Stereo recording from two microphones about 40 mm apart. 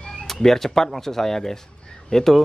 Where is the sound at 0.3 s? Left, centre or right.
Centre.